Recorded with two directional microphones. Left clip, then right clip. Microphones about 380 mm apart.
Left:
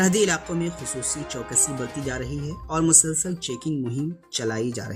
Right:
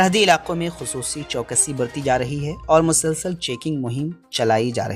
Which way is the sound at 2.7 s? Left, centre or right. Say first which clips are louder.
Right 6 dB; centre.